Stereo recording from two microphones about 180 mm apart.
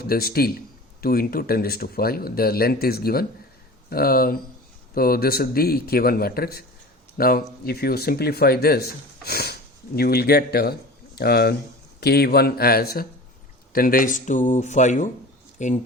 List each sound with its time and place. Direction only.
0.0 s speech: 60° left (ahead or behind); by 15.8 s 40° left (ahead or behind)